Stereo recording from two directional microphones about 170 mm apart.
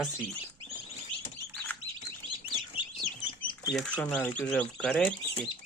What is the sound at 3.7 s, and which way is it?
Speech, 5° left (ahead or behind).